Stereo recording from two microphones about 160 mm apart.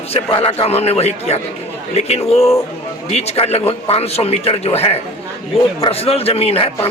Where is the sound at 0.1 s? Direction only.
35° left (ahead or behind).